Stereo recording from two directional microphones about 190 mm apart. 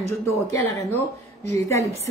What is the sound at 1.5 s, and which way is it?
Speech, 15° left (ahead or behind).